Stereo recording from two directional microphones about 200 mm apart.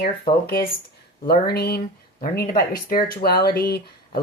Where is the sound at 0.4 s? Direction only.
50° left (ahead or behind).